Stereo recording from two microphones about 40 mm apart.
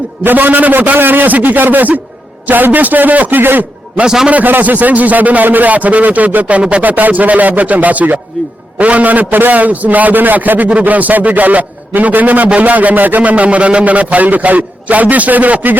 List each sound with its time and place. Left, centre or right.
0.3 s a man's voice: right
0.9 s a man's voice: right
4.0 s a man's voice: centre
4.4 s a man's voice: right
6.6 s speech: right
6.8 s a man's voice: right